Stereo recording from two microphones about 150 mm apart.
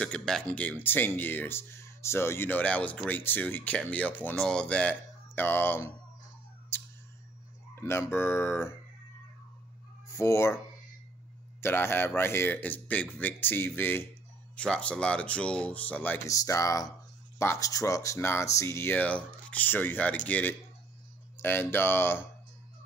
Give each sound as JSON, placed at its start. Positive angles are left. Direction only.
{"t": 0.0, "sound": "speech", "side_deg": 5}
{"t": 6.7, "sound": "a sound", "side_deg": 15}
{"t": 7.7, "sound": "speech", "side_deg": 15}
{"t": 10.0, "sound": "speech", "side_deg": 20}
{"t": 11.6, "sound": "speech", "side_deg": 15}